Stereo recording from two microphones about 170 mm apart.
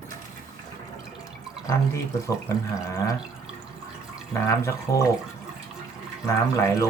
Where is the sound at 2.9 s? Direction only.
20° left (ahead or behind).